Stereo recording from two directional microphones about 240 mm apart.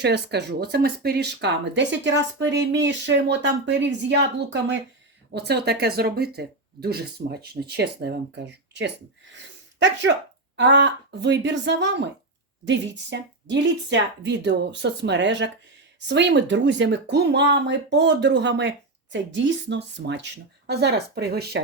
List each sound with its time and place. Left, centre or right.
0.0 s speech: right
9.3 s a sound: right
10.6 s speech: right